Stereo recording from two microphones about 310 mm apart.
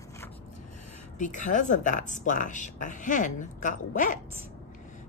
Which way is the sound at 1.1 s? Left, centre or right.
Left.